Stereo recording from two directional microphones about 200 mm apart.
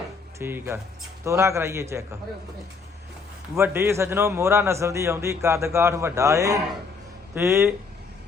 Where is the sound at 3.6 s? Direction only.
10° right (ahead or behind).